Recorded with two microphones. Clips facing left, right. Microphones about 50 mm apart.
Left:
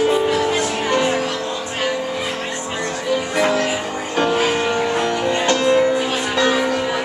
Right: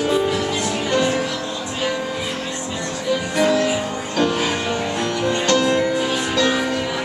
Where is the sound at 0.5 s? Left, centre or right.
Left.